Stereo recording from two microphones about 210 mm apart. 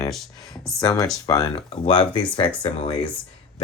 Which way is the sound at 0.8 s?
15° left (ahead or behind).